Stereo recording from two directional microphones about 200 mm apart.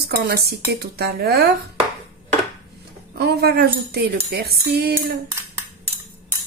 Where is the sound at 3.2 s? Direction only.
55° right (ahead or behind).